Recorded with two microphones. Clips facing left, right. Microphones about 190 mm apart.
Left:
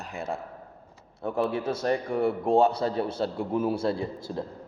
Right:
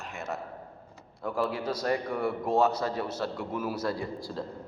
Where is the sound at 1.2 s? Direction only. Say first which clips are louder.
Left 3 dB; 25° left (ahead or behind).